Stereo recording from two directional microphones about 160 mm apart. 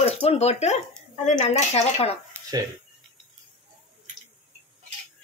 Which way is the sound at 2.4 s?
15° right (ahead or behind).